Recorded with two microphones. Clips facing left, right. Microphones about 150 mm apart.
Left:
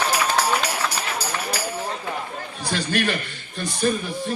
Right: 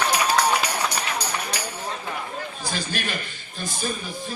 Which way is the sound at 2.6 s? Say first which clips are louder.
Left 8 dB; 65° left (ahead or behind).